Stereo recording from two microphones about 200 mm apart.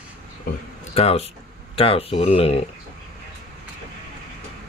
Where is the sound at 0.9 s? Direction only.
30° left (ahead or behind).